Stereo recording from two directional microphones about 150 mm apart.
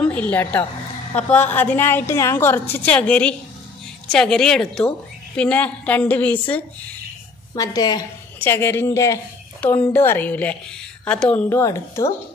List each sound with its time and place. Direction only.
0.0 s a woman's voice: 10° left (ahead or behind)
7.5 s a woman's voice: 25° left (ahead or behind); by 11.4 s 10° left (ahead or behind)
11.4 s a woman's voice: 20° left (ahead or behind)